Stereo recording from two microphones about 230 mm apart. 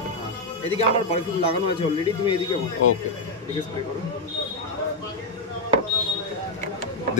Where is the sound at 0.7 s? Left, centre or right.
Left.